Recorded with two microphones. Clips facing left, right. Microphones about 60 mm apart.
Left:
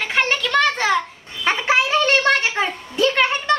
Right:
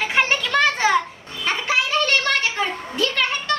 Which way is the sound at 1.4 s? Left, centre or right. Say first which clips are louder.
Left 4 dB; left.